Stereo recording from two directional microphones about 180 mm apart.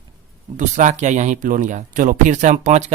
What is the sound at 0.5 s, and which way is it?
Speech, 45° right (ahead or behind).